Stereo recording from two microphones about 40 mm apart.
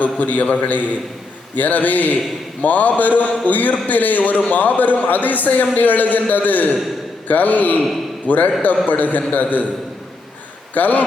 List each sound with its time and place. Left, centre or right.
0.0 s a man's voice: left
10.8 s a man's voice: left